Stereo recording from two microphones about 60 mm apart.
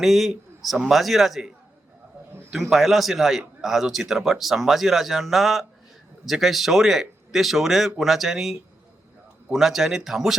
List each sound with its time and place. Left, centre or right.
0.0 s a man's voice: centre
2.5 s a man's voice: centre